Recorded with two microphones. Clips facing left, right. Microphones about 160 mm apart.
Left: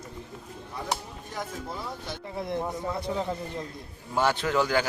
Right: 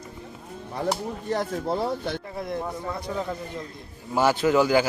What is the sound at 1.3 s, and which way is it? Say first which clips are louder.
Speech: right 10 dB; 70° right (ahead or behind).